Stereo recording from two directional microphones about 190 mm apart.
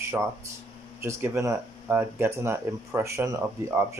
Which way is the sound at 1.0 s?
15° right (ahead or behind).